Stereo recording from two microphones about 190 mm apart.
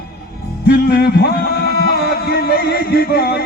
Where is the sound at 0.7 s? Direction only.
55° left (ahead or behind).